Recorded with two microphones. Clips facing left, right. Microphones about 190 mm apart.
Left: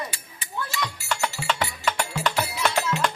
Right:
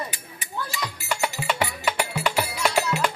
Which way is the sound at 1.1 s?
10° right (ahead or behind).